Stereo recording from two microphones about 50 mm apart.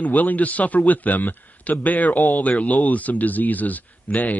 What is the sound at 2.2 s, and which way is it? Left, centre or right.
Speech, left.